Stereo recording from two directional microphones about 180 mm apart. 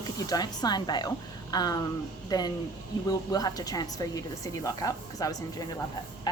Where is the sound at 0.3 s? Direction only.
20° left (ahead or behind).